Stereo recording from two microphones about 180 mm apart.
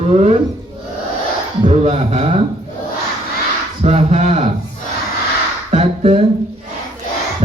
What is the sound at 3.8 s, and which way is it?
Speech, 40° right (ahead or behind).